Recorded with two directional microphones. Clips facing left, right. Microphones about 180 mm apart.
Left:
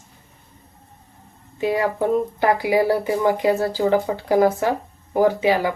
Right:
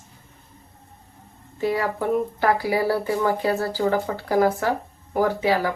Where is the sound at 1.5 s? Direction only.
15° left (ahead or behind).